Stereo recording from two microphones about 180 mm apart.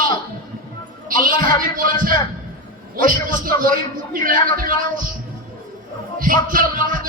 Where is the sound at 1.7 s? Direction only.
50° right (ahead or behind).